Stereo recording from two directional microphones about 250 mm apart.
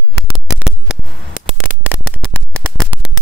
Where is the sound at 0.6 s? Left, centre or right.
Centre.